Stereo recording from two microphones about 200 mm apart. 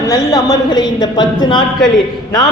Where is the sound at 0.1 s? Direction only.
15° left (ahead or behind).